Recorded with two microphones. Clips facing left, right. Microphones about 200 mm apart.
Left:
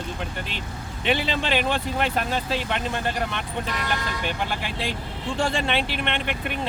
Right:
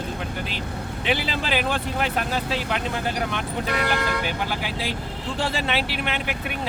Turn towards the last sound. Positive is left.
turn(degrees=-5)  # may be behind; listen again after turning